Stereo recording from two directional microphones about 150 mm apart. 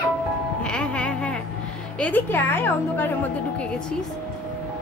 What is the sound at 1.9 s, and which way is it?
A woman's voice, 10° left (ahead or behind).